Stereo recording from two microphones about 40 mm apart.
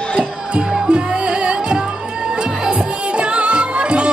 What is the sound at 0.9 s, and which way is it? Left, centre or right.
Music, right.